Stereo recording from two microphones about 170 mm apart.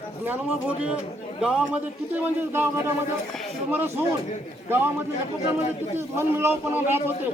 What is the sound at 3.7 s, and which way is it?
Speech, 15° right (ahead or behind).